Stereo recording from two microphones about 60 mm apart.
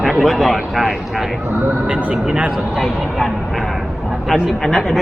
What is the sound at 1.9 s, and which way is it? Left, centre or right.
Speech, right.